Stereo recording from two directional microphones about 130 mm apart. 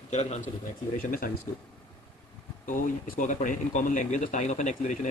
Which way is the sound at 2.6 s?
85° left.